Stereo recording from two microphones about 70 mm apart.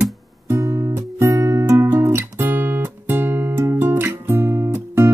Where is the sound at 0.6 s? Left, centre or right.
Right.